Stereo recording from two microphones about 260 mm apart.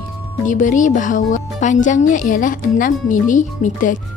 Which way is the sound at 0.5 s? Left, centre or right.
Left.